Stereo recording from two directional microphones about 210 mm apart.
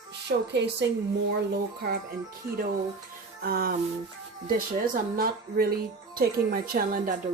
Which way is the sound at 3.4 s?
45° right (ahead or behind).